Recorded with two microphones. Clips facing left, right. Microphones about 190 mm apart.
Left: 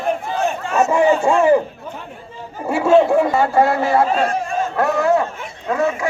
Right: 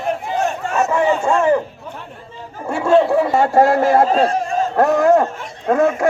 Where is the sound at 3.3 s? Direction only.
40° right (ahead or behind).